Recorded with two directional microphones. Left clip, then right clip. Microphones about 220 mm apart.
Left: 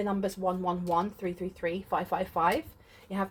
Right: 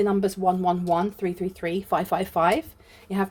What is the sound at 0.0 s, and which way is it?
Speech, 55° right (ahead or behind).